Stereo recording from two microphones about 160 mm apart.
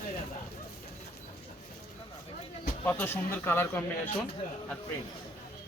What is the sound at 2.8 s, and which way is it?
Speech, 15° left (ahead or behind).